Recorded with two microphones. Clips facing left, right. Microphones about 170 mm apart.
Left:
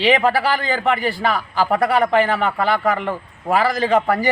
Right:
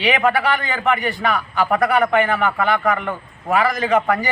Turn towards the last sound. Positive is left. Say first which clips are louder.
# left 1 dB
turn(degrees=30)  # may be behind; listen again after turning